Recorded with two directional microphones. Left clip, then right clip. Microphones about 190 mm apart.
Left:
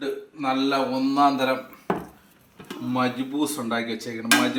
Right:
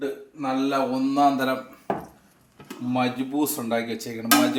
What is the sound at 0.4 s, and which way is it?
A man's voice, 15° right (ahead or behind).